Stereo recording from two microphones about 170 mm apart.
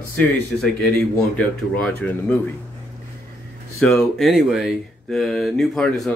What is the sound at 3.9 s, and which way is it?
Speech, centre (ahead or behind).